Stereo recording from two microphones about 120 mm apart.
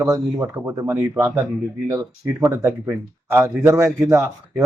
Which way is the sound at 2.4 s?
20° right (ahead or behind).